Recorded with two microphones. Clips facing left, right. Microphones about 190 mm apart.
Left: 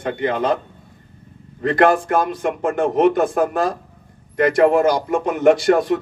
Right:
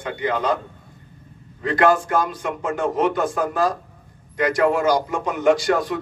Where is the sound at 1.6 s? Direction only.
55° left (ahead or behind).